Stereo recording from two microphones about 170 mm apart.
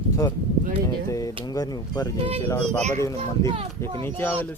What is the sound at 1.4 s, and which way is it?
Speech, 20° left (ahead or behind).